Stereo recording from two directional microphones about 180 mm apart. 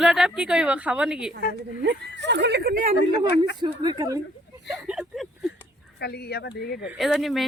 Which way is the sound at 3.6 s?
25° right (ahead or behind).